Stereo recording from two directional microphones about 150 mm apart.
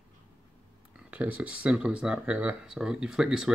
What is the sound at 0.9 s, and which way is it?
Speech, 10° right (ahead or behind).